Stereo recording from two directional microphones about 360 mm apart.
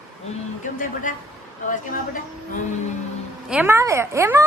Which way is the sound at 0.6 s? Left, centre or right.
Left.